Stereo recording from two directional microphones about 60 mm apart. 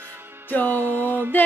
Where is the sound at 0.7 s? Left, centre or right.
Right.